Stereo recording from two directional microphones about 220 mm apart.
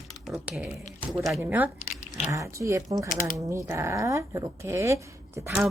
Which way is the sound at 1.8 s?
35° left (ahead or behind).